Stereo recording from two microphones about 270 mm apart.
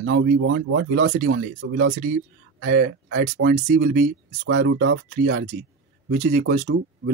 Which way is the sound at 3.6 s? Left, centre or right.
Right.